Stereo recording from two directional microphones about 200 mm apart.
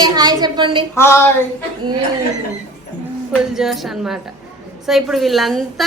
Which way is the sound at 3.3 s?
Centre (ahead or behind).